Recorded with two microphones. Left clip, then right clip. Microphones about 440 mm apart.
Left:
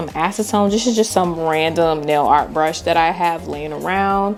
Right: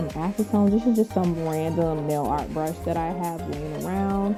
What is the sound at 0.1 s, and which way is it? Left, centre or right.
Speech, centre.